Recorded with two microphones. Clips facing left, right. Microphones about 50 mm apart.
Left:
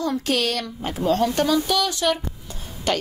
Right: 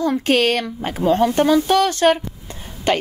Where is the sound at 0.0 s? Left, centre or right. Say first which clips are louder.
Right 6 dB; right.